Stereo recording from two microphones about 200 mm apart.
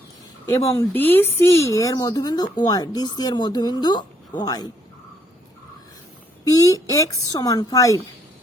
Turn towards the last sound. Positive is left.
turn(degrees=15)  # may be behind; listen again after turning